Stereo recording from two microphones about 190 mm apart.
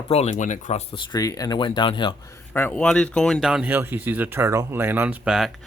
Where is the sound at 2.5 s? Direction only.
10° left (ahead or behind).